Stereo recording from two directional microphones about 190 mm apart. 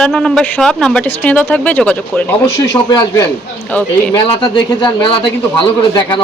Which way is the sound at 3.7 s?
10° left (ahead or behind).